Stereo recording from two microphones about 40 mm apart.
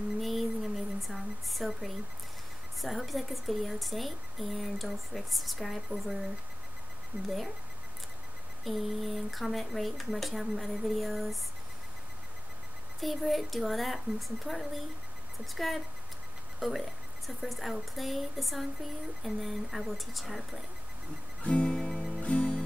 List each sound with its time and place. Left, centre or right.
0.2 s a sound: centre
2.8 s speech: centre
7.2 s speech: centre
8.6 s speech: centre
13.0 s speech: centre
21.4 s music: left
21.6 s music: centre
22.2 s music: left